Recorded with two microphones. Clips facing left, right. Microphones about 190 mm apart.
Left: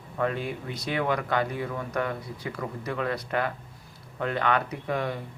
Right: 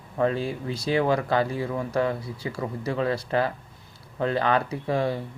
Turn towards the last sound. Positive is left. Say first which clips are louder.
# right 4 dB
turn(degrees=-30)  # may be behind; listen again after turning